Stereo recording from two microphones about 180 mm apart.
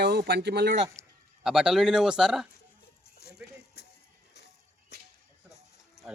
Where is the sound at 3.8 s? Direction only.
65° left (ahead or behind).